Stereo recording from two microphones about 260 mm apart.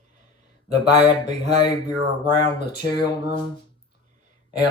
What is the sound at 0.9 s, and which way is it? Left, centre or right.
Speech, centre.